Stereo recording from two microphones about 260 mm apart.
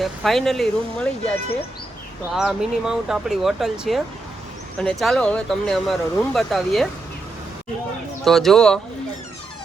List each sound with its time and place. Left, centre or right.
0.0 s speech: centre
2.3 s speech: centre
8.2 s speech: centre